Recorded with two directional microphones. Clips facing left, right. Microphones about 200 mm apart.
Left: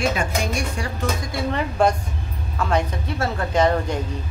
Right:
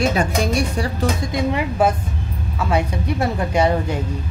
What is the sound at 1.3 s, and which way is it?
A woman's voice, 15° right (ahead or behind).